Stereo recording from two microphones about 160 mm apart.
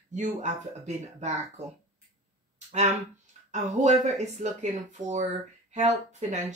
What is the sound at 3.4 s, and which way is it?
Speech, 45° right (ahead or behind).